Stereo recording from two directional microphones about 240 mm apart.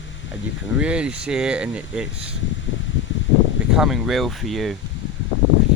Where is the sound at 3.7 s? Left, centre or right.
Centre.